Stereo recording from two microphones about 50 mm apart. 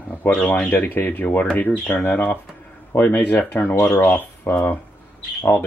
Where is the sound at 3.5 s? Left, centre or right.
Left.